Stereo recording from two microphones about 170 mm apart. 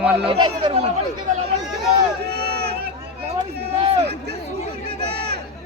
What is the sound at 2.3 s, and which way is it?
Run, 70° right (ahead or behind).